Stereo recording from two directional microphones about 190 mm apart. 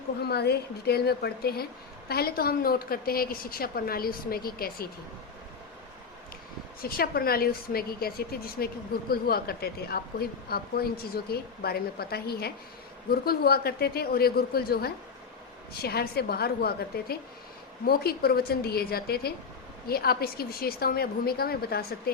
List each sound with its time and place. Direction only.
0.2 s a woman's voice: 60° left (ahead or behind)
6.8 s a woman's voice: 50° left (ahead or behind)